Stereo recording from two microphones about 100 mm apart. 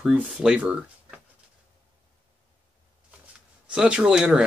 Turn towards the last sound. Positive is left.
turn(degrees=-5)  # may be behind; listen again after turning